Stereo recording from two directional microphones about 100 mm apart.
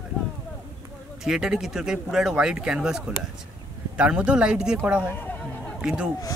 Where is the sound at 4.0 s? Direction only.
10° right (ahead or behind).